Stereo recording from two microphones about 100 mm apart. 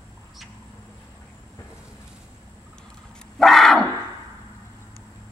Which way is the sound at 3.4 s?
Centre (ahead or behind).